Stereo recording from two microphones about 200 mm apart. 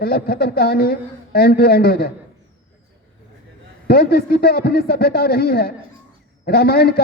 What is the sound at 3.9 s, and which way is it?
A man's voice, 50° left (ahead or behind).